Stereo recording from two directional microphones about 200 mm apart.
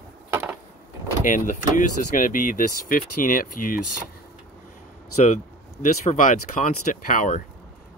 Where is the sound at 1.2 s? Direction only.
40° left (ahead or behind).